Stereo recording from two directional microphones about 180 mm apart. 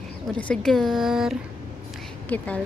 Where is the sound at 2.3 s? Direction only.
10° left (ahead or behind).